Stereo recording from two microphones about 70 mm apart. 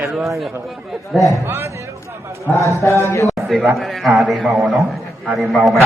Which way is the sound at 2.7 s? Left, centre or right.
Left.